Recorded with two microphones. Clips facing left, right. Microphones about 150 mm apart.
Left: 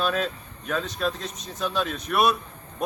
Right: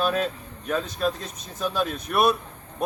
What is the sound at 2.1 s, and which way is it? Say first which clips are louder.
Speech: even; 30° right (ahead or behind).